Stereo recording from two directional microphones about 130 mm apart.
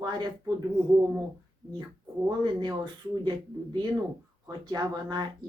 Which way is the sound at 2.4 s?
35° right (ahead or behind).